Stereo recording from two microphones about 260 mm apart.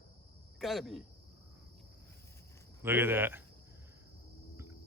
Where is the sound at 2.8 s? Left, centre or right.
Centre.